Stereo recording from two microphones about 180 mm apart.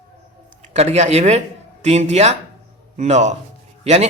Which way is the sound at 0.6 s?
40° right (ahead or behind).